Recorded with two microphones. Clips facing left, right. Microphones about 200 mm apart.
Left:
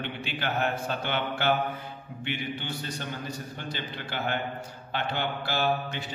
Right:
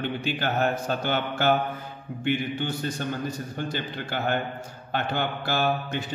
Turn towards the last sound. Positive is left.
turn(degrees=-50)  # may be behind; listen again after turning